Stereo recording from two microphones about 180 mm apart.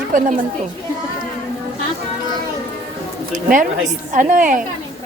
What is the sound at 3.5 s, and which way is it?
Speech, 50° right (ahead or behind).